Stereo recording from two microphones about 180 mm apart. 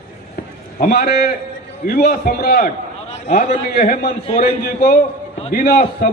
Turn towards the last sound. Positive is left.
turn(degrees=55)  # may be behind; listen again after turning